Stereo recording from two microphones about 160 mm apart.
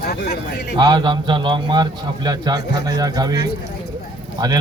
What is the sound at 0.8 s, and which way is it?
A man's voice, 25° right (ahead or behind).